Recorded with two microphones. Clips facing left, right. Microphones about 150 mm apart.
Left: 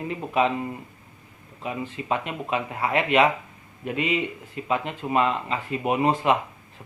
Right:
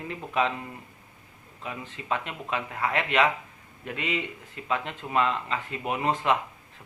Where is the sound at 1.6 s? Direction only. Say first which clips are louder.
Left 7 dB; 20° left (ahead or behind).